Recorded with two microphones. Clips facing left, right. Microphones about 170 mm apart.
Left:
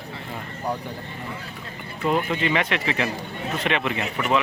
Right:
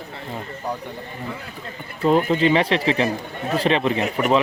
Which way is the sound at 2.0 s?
35° right (ahead or behind).